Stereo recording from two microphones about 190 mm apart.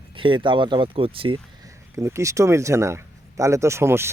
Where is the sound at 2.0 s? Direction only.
15° right (ahead or behind).